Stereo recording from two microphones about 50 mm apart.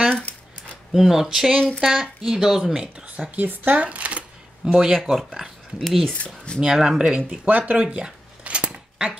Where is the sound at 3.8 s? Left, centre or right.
Right.